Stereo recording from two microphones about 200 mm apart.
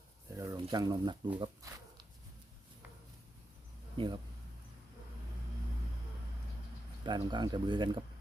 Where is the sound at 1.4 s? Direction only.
20° right (ahead or behind).